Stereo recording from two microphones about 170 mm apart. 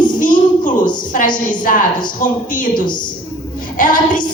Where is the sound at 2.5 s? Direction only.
50° left (ahead or behind).